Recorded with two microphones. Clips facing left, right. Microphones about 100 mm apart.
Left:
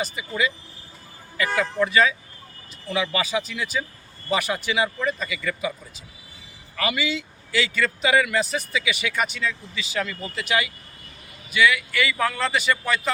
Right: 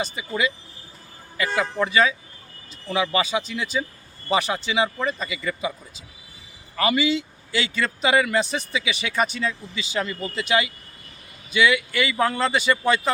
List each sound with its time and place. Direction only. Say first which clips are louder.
0.0 s a man's voice: right 1 dB; 25° right (ahead or behind)
6.7 s a man's voice: right 5 dB; 30° right (ahead or behind)